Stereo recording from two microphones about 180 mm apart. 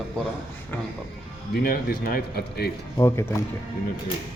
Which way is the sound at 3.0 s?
15° left (ahead or behind).